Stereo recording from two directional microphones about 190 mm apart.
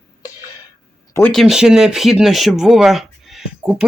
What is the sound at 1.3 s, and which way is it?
Speech, centre (ahead or behind).